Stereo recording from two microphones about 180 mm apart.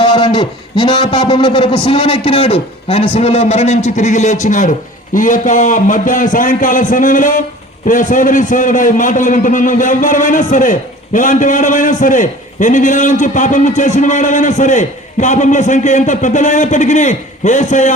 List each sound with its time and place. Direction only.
0.0 s a man's voice: 25° left (ahead or behind); by 17.9 s 40° left (ahead or behind)